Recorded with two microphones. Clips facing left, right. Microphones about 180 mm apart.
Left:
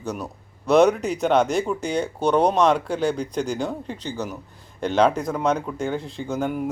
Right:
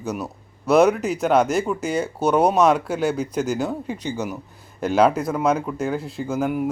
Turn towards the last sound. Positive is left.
turn(degrees=-5)  # may be behind; listen again after turning